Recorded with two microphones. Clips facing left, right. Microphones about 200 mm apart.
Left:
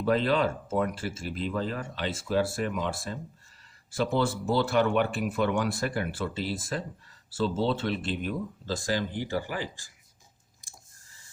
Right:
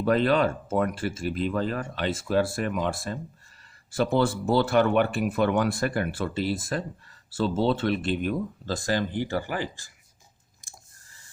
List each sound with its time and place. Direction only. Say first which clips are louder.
0.0 s speech: right 3 dB; 55° right (ahead or behind)